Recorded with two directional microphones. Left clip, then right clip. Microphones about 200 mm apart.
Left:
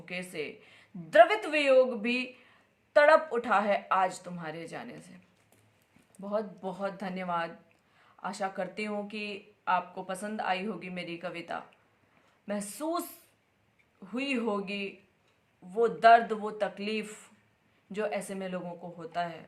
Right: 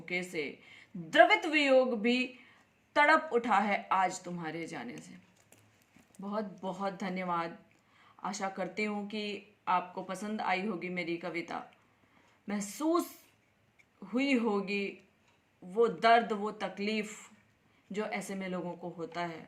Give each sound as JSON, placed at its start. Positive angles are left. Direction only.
{"t": 0.0, "sound": "speech", "side_deg": 15}
{"t": 6.1, "sound": "speech", "side_deg": 15}
{"t": 14.1, "sound": "speech", "side_deg": 15}